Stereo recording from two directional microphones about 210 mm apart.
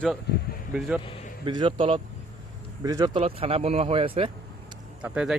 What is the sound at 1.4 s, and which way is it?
Speech, 20° right (ahead or behind).